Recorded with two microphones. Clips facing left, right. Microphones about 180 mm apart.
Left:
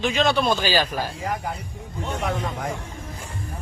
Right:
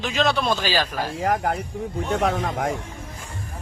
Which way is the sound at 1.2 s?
75° right (ahead or behind).